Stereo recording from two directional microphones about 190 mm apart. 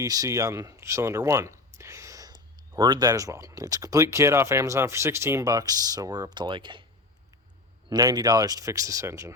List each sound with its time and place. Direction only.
0.0 s speech: 20° right (ahead or behind)
7.9 s speech: 20° right (ahead or behind)